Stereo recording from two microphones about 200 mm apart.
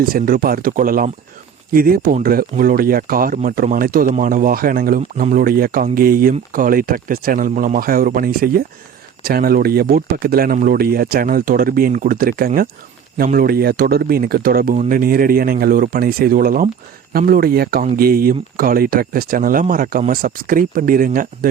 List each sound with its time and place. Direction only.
0.0 s speech: 45° right (ahead or behind)